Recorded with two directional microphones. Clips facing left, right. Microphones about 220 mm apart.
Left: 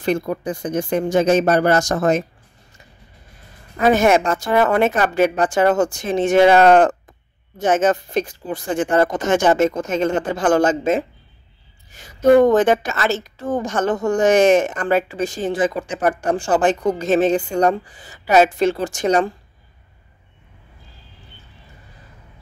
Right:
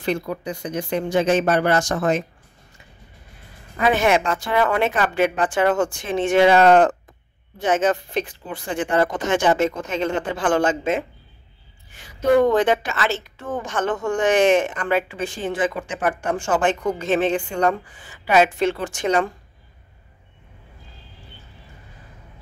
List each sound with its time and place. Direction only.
0.0 s speech: 45° left (ahead or behind)
3.9 s a woman's voice: 45° left (ahead or behind)